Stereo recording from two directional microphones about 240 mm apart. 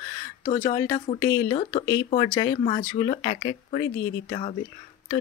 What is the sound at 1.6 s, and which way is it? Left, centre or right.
Speech, left.